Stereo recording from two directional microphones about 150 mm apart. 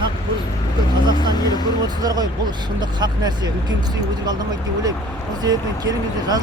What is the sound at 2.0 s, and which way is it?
Speech, 25° right (ahead or behind).